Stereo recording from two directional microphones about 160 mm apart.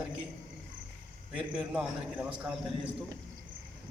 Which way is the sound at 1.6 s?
10° right (ahead or behind).